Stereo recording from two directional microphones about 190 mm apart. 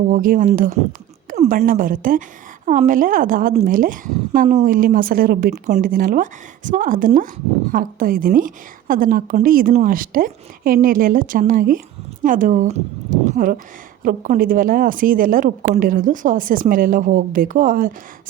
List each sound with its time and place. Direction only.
0.1 s a woman's voice: 45° right (ahead or behind)